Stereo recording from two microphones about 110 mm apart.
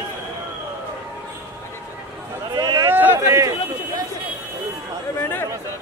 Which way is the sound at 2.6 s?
35° right (ahead or behind).